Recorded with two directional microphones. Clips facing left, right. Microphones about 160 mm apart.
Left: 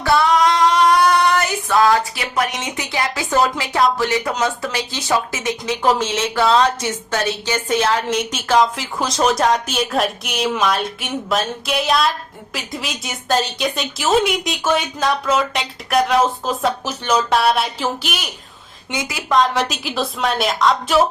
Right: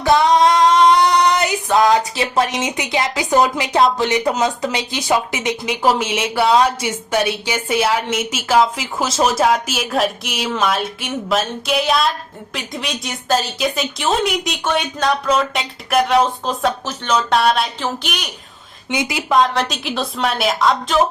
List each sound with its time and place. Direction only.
0.0 s female singing: 20° right (ahead or behind)
2.3 s a woman's voice: 25° right (ahead or behind); by 18.3 s 5° left (ahead or behind)
18.9 s speech: 20° right (ahead or behind)
19.5 s a woman's voice: 5° left (ahead or behind)